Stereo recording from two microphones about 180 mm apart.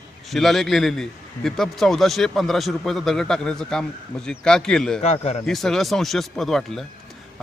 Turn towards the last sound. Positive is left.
turn(degrees=0)  # may be behind; listen again after turning